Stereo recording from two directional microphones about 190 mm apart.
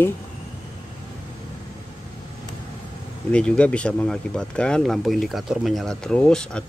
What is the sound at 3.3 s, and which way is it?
Speech, 5° left (ahead or behind).